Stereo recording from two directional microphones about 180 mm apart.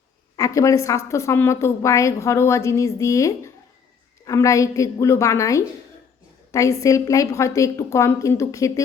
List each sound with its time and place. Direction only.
0.3 s a woman's voice: 20° left (ahead or behind)